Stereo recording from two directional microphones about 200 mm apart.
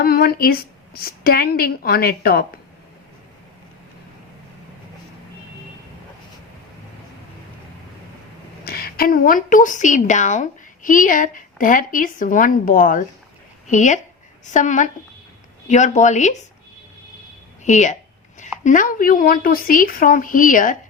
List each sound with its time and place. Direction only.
0.0 s a woman's voice: 50° left (ahead or behind)
8.6 s a woman's voice: 50° left (ahead or behind)
17.6 s a woman's voice: 35° left (ahead or behind)